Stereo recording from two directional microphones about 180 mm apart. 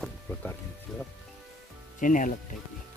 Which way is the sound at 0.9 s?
Centre (ahead or behind).